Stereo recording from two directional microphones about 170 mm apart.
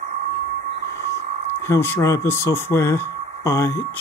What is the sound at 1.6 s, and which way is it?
Speech, 15° left (ahead or behind).